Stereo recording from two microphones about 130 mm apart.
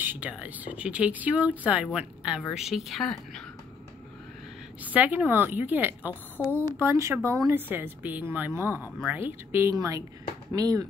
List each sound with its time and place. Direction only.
0.0 s speech: 15° right (ahead or behind)
4.8 s speech: 10° right (ahead or behind); by 10.9 s 30° right (ahead or behind)